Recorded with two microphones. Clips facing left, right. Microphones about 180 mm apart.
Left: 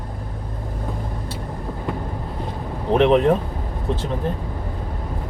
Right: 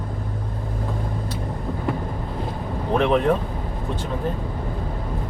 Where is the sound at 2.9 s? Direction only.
25° left (ahead or behind).